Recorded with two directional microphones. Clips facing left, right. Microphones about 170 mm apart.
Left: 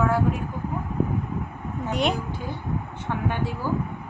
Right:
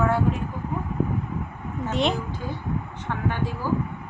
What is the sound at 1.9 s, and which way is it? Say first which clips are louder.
Speech: even; centre (ahead or behind).